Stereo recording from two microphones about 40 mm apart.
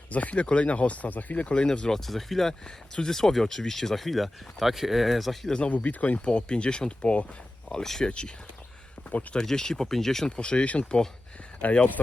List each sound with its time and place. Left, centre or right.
0.1 s speech: left
1.9 s speech: centre
2.6 s speech: centre
5.6 s speech: left
6.1 s speech: left
7.7 s speech: centre
9.4 s speech: centre
10.2 s speech: left